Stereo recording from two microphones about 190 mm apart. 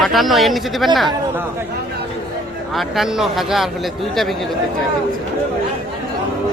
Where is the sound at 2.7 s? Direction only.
Centre (ahead or behind).